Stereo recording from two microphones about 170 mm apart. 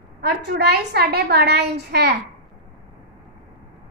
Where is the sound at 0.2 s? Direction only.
70° right (ahead or behind).